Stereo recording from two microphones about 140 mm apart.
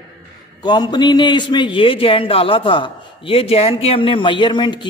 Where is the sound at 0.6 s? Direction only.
30° left (ahead or behind).